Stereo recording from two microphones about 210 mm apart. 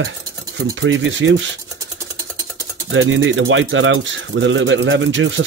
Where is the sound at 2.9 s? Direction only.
65° right (ahead or behind).